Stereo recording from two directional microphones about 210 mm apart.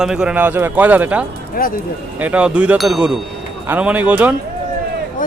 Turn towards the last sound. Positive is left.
turn(degrees=-5)  # may be behind; listen again after turning